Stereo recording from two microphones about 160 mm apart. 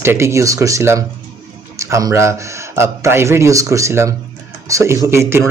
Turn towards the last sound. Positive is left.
turn(degrees=-15)  # may be behind; listen again after turning